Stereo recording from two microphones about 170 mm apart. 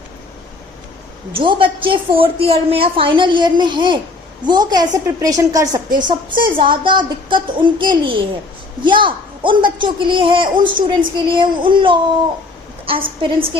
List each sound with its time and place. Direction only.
1.3 s a woman's voice: 30° right (ahead or behind)